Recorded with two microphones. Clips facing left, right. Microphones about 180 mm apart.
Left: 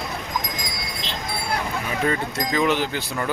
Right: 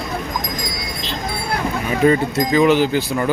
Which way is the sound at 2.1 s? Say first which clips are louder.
Right 8 dB; 5° right (ahead or behind).